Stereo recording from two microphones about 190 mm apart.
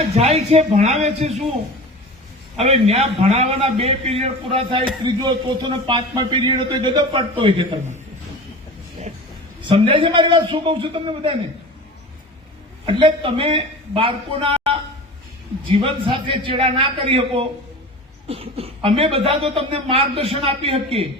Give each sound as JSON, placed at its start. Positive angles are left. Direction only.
{"t": 0.0, "sound": "speech", "side_deg": -35}
{"t": 2.6, "sound": "a man's voice", "side_deg": -35}
{"t": 9.6, "sound": "a man's voice", "side_deg": -30}
{"t": 12.8, "sound": "a man's voice", "side_deg": -25}